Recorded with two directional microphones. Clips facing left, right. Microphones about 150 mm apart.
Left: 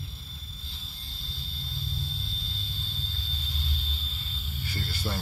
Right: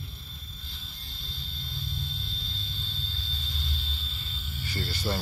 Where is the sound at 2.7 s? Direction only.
35° left (ahead or behind).